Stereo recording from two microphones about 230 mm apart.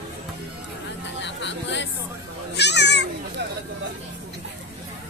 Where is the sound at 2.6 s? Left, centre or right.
Left.